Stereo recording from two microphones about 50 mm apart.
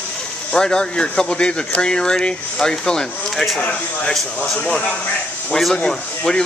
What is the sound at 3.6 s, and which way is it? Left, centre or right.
Speech, left.